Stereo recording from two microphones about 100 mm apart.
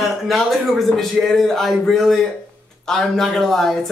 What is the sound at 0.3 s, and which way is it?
A man's voice, centre (ahead or behind).